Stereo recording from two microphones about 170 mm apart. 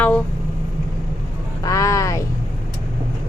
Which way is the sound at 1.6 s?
20° left (ahead or behind).